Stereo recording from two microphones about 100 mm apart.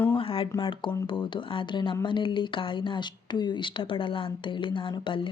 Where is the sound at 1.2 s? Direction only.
55° left (ahead or behind).